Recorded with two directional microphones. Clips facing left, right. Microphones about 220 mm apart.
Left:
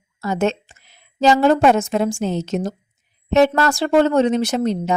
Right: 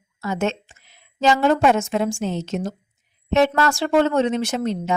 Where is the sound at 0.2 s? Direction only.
35° left (ahead or behind).